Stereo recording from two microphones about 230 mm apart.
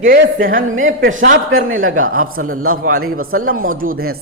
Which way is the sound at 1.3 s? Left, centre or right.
Right.